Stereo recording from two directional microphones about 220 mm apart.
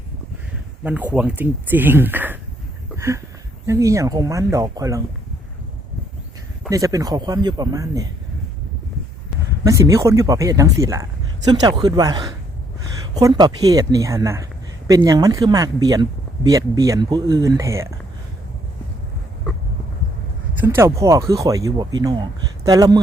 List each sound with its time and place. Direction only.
0.9 s speech: 5° right (ahead or behind)
2.9 s a sound: 15° right (ahead or behind)
3.7 s speech: 15° right (ahead or behind)
6.7 s speech: 15° right (ahead or behind)
9.6 s speech: 15° right (ahead or behind)
20.6 s speech: 10° right (ahead or behind)